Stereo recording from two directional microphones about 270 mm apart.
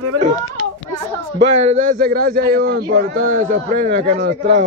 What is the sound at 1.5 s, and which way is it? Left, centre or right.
A man's voice, right.